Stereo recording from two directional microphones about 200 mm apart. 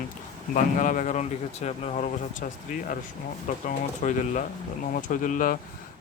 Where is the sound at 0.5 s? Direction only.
40° left (ahead or behind).